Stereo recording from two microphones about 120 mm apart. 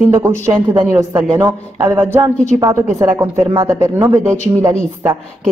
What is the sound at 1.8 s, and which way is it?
Speech, 20° right (ahead or behind).